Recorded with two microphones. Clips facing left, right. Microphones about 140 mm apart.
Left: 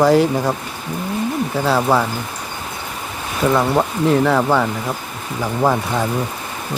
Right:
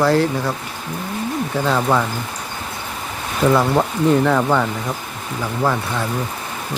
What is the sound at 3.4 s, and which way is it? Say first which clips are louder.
Speech: even; centre (ahead or behind).